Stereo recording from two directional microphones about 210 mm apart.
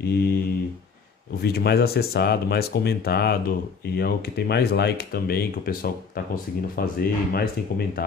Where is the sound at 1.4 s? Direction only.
50° left (ahead or behind).